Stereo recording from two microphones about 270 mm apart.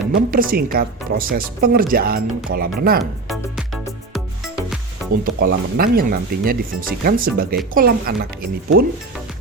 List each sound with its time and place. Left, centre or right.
0.1 s speech: right
5.2 s speech: right